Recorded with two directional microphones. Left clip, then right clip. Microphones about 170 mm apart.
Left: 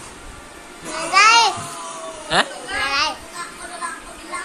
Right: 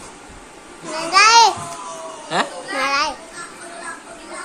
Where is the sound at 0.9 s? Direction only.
45° right (ahead or behind).